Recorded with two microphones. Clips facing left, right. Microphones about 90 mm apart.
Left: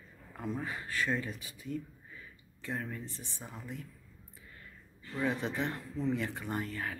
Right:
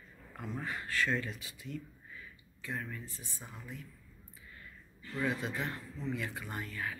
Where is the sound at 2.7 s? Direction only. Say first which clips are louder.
Left 2 dB; 40° left (ahead or behind).